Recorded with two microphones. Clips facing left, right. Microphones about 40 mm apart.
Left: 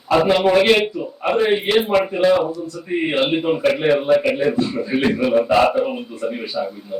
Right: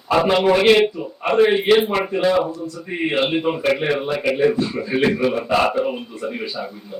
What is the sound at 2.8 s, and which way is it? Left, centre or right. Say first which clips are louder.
Speech: left 1 dB; centre.